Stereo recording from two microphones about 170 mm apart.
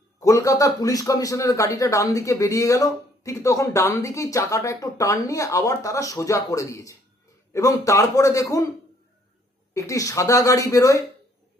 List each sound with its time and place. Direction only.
0.2 s a man's voice: 20° left (ahead or behind)
9.7 s a man's voice: 20° left (ahead or behind)